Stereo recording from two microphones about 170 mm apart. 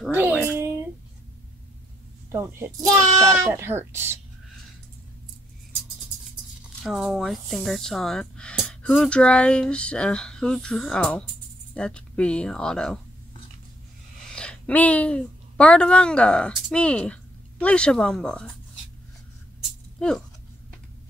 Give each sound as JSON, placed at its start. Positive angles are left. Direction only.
{"t": 0.1, "sound": "a child's voice", "side_deg": -10}
{"t": 2.3, "sound": "a child's voice", "side_deg": -20}
{"t": 6.8, "sound": "speech", "side_deg": -5}
{"t": 14.3, "sound": "a woman's voice", "side_deg": 5}
{"t": 20.0, "sound": "speech", "side_deg": 5}